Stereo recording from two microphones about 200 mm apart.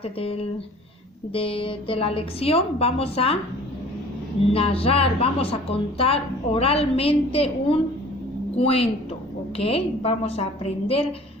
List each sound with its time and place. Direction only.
0.0 s a woman's voice: 30° left (ahead or behind)
4.5 s a woman's voice: 30° left (ahead or behind)